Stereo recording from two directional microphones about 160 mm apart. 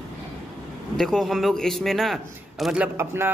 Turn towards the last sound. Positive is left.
turn(degrees=-15)  # may be behind; listen again after turning